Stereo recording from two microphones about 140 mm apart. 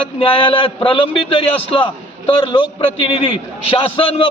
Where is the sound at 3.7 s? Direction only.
40° left (ahead or behind).